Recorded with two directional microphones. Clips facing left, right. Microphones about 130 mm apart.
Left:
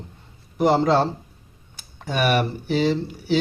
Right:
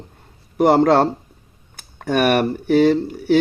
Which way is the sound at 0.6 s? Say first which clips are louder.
Right 4 dB; 65° right (ahead or behind).